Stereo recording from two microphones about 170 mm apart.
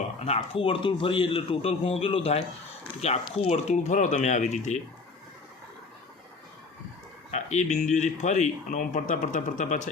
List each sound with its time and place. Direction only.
0.2 s a man's voice: 35° left (ahead or behind)
7.3 s speech: 45° left (ahead or behind)